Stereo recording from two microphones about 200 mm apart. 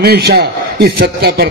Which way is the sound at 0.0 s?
50° right (ahead or behind).